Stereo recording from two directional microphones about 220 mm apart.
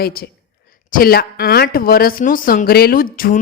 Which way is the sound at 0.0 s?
45° left (ahead or behind).